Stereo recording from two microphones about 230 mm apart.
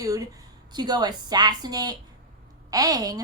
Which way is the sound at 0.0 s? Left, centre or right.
Centre.